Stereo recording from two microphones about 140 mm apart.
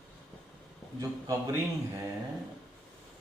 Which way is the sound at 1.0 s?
20° right (ahead or behind).